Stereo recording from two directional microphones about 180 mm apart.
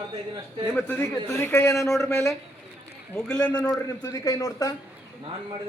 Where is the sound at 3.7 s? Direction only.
15° left (ahead or behind).